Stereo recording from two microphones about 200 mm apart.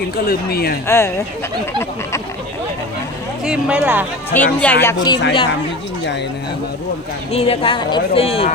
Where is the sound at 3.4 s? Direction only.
5° right (ahead or behind).